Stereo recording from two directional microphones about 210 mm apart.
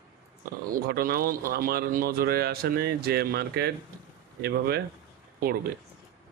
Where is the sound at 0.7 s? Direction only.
45° right (ahead or behind).